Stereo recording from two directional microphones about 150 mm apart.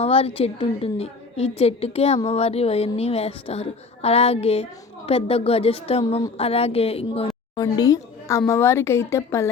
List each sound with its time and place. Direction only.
0.0 s a woman's voice: 40° left (ahead or behind)
7.3 s speech: 25° left (ahead or behind)